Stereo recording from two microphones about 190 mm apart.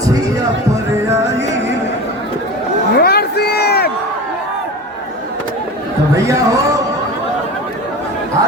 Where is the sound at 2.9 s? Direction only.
55° left (ahead or behind).